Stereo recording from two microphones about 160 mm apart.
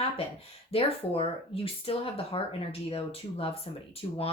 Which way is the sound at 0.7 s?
35° left (ahead or behind).